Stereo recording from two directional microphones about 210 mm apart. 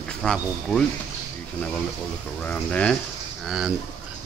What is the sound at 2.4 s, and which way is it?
Speech, 5° left (ahead or behind).